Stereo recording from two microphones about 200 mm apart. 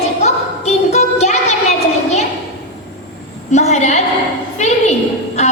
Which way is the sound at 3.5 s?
35° left (ahead or behind).